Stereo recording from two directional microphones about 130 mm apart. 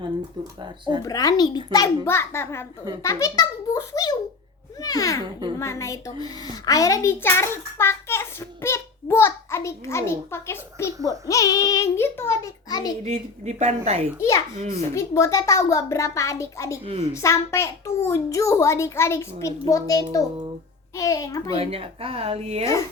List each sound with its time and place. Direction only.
1.0 s a child's voice: 30° left (ahead or behind)
2.0 s a child's voice: 20° left (ahead or behind)
13.1 s speech: 60° right (ahead or behind)
14.2 s a child's voice: 25° left (ahead or behind)
16.8 s speech: 45° right (ahead or behind)
17.2 s a child's voice: 20° left (ahead or behind)
21.5 s speech: 50° right (ahead or behind)
22.6 s a child's voice: 25° left (ahead or behind)